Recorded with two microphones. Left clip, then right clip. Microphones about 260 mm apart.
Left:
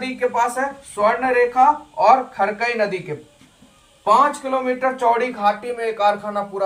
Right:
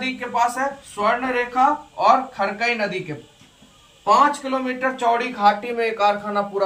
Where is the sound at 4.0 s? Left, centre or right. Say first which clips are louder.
Left 1 dB; centre.